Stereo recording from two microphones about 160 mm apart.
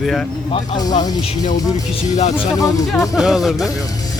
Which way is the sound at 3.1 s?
Centre (ahead or behind).